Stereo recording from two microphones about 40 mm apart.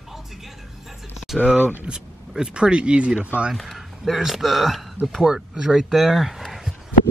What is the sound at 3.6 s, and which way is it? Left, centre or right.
Speech, centre.